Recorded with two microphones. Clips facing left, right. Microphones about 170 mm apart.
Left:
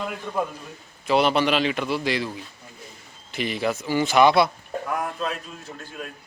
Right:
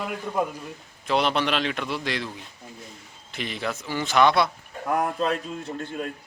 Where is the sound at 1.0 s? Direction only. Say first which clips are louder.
Left 3 dB; 5° left (ahead or behind).